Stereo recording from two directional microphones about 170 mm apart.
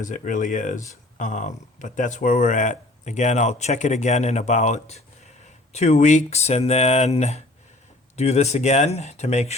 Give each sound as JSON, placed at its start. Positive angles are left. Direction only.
{"t": 0.0, "sound": "speech", "side_deg": 50}